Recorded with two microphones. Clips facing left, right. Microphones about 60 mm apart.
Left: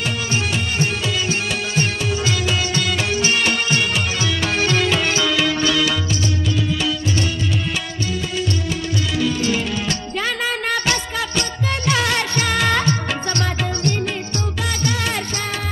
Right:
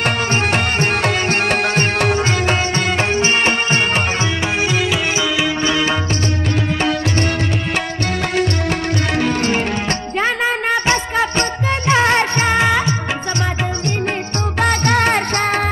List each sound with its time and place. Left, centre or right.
0.0 s music: right
4.6 s music: centre
5.6 s music: right
6.8 s music: right
9.1 s music: right
12.6 s music: centre
14.6 s music: right